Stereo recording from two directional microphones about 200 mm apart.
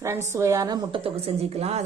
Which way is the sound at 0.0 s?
15° right (ahead or behind).